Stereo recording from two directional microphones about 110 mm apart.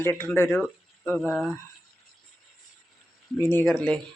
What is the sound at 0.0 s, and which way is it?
Speech, 20° left (ahead or behind).